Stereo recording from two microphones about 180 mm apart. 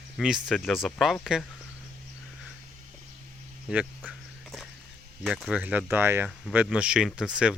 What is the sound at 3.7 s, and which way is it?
Speech, 5° right (ahead or behind).